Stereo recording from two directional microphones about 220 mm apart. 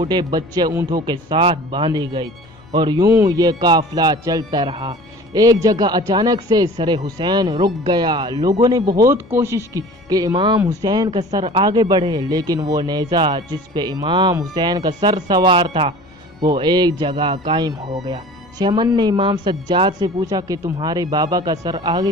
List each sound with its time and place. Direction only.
0.0 s speech: 20° right (ahead or behind)
3.1 s music: 15° right (ahead or behind)
5.8 s speech: 15° right (ahead or behind)
8.6 s music: 15° right (ahead or behind)
10.6 s speech: 15° right (ahead or behind)